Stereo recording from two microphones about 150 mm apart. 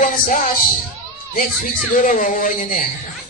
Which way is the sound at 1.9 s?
60° left (ahead or behind).